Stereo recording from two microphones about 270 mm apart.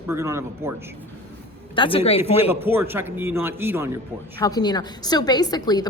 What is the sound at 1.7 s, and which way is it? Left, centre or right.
Speech, centre.